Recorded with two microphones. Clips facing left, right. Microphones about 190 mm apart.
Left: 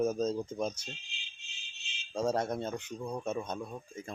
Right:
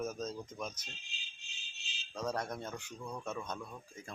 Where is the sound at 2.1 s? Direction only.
25° left (ahead or behind).